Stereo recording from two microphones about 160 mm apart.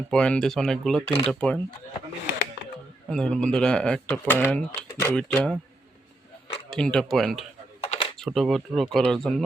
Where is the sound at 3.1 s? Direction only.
5° left (ahead or behind).